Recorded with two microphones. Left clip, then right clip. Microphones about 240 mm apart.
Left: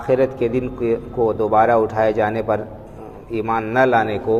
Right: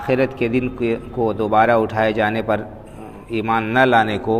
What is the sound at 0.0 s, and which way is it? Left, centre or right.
A man's voice, right.